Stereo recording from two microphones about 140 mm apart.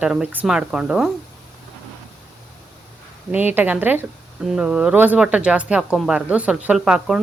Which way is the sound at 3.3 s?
10° right (ahead or behind).